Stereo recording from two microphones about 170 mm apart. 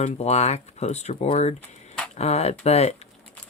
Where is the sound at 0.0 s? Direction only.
40° left (ahead or behind).